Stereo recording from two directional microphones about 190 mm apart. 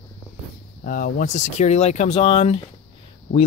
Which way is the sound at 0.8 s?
45° left (ahead or behind).